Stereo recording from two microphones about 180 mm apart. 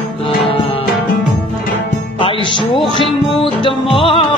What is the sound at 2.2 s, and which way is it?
Music, 30° left (ahead or behind).